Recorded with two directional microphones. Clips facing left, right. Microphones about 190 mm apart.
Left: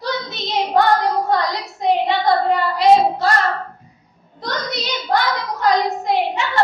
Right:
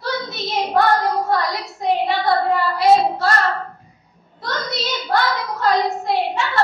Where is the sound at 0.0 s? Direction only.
20° left (ahead or behind).